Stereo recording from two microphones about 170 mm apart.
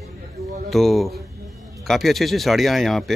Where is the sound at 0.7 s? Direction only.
Centre (ahead or behind).